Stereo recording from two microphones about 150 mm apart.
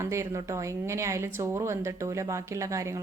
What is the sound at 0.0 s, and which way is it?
A woman's voice, 20° right (ahead or behind).